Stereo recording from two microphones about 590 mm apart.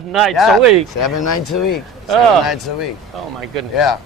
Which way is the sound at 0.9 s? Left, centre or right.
Left.